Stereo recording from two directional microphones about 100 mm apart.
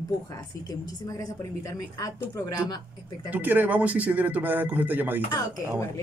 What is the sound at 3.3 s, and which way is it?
Speech, 20° right (ahead or behind).